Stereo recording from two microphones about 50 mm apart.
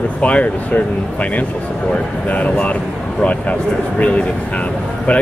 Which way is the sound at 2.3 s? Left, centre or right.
Left.